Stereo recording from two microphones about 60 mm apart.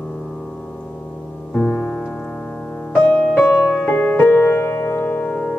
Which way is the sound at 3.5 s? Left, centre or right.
Centre.